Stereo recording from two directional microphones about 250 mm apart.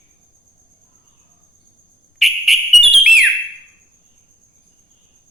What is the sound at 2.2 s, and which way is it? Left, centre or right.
Whistle, centre.